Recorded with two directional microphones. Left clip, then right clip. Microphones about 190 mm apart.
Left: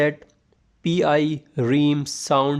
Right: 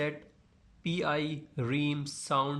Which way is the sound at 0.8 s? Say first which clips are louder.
Left 12 dB; 40° left (ahead or behind).